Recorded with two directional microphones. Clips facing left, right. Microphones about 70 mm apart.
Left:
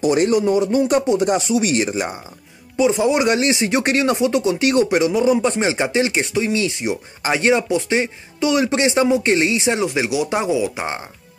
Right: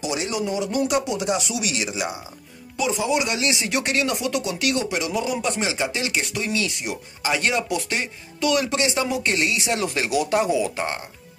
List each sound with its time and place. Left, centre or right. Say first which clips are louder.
0.0 s speech: left 10 dB; left
9.8 s speech: left 3 dB; centre
10.3 s speech: left 1 dB; centre